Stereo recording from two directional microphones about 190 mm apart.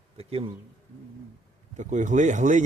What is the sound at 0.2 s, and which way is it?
Speech, 30° right (ahead or behind).